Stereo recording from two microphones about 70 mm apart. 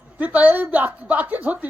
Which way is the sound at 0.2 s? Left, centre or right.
Right.